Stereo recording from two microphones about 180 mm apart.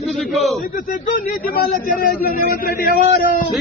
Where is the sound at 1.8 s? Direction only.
55° left (ahead or behind).